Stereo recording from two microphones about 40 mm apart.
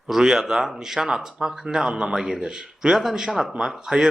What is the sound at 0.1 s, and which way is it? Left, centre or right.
Speech, centre.